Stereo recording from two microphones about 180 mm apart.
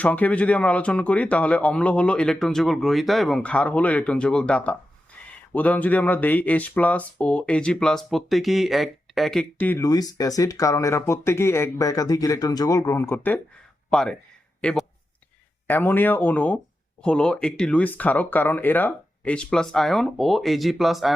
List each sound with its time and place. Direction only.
0.0 s speech: 10° left (ahead or behind)
9.8 s speech: 20° left (ahead or behind); by 21.2 s centre (ahead or behind)